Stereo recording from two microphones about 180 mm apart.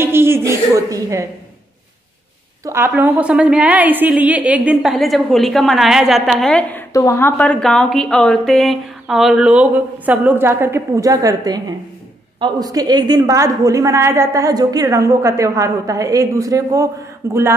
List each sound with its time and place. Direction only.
0.0 s a woman's voice: 15° right (ahead or behind)
2.6 s a woman's voice: 15° right (ahead or behind); by 6.8 s 5° left (ahead or behind)
6.9 s a woman's voice: 15° left (ahead or behind); by 17.6 s 15° right (ahead or behind)